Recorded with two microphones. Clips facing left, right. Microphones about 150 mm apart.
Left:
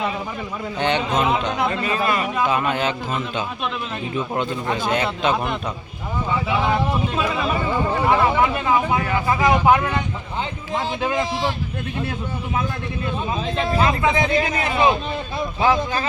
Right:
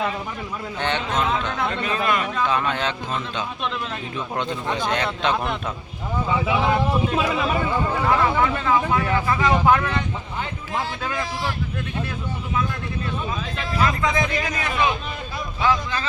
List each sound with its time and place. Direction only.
0.8 s speech: 15° left (ahead or behind)
4.4 s a man's voice: 5° left (ahead or behind)
8.0 s speech: 15° left (ahead or behind)
11.0 s speech: 20° left (ahead or behind)
13.3 s a man's voice: 30° left (ahead or behind)